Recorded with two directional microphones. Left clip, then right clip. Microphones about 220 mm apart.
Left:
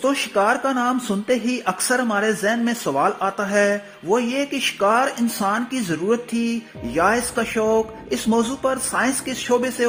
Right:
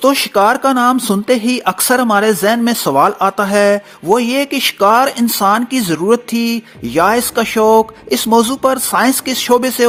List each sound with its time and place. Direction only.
0.0 s speech: 35° right (ahead or behind)